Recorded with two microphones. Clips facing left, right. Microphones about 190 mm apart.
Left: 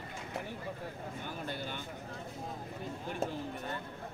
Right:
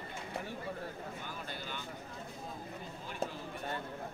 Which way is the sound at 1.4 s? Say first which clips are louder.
Left 4 dB; 50° left (ahead or behind).